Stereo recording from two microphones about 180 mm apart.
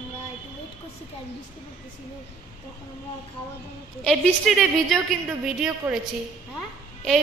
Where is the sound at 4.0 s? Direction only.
Centre (ahead or behind).